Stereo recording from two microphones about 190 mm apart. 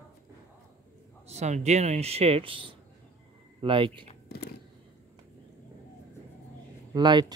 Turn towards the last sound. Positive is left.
turn(degrees=-20)  # may be behind; listen again after turning